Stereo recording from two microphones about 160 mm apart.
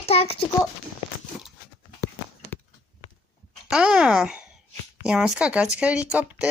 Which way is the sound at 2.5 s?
10° left (ahead or behind).